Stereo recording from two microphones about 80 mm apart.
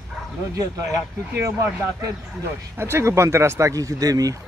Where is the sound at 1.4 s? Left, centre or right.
Right.